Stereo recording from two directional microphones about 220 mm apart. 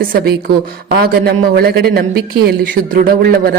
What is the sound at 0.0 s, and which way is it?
A woman's voice, 40° right (ahead or behind).